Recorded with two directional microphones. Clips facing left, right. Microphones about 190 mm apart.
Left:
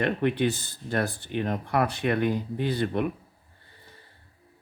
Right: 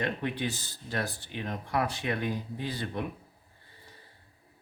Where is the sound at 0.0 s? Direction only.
60° left (ahead or behind).